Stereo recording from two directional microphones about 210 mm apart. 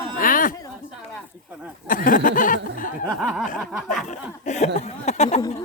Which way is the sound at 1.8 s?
40° left (ahead or behind).